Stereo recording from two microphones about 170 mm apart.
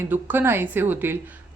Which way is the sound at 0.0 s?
10° right (ahead or behind).